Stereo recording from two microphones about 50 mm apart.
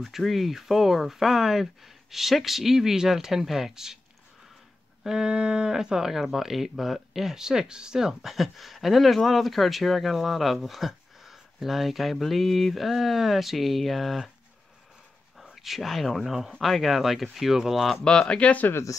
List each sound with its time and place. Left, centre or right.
0.1 s speech: centre
5.0 s speech: centre
15.5 s speech: centre
18.0 s speech: centre
18.7 s speech: left